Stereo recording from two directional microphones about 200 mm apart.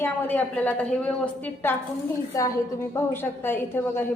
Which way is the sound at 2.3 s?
15° left (ahead or behind).